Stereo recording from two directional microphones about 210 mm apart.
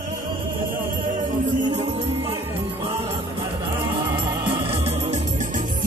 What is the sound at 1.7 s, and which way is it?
Music, 30° right (ahead or behind).